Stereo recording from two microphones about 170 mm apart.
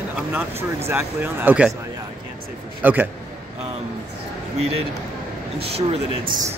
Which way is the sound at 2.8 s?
10° right (ahead or behind).